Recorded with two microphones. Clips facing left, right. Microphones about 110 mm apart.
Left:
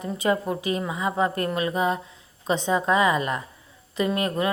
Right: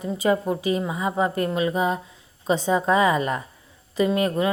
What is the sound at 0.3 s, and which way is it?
A woman's voice, 20° right (ahead or behind).